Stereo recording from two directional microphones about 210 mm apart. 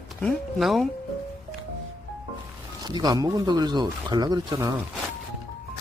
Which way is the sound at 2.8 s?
20° right (ahead or behind).